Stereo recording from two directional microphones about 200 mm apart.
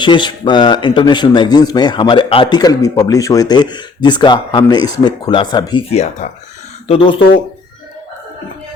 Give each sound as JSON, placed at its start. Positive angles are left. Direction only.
{"t": 0.0, "sound": "speech", "side_deg": 25}
{"t": 5.9, "sound": "speech", "side_deg": 35}